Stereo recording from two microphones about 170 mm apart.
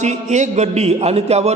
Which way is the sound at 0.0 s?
45° right (ahead or behind).